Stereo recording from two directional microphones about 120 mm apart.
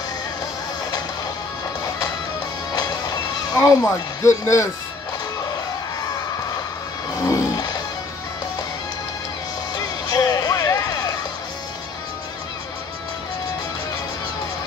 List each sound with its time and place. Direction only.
3.5 s speech: 25° left (ahead or behind)
7.2 s music: 30° left (ahead or behind)
10.0 s music: 30° left (ahead or behind)